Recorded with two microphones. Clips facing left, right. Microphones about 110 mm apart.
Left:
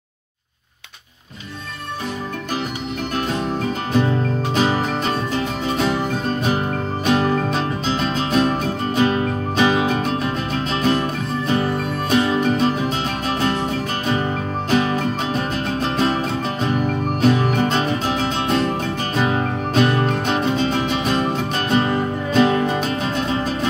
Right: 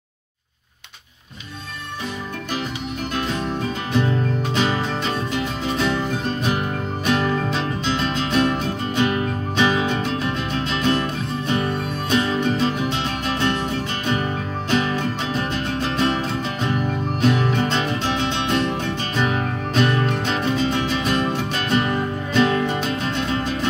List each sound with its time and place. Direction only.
4.6 s music: 35° left (ahead or behind)
7.1 s music: 30° left (ahead or behind)
14.7 s music: 35° left (ahead or behind)
17.3 s music: 15° left (ahead or behind)
17.6 s music: 35° left (ahead or behind)
21.5 s music: 35° left (ahead or behind)